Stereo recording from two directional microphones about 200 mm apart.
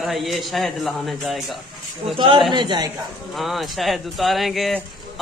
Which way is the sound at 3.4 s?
Centre (ahead or behind).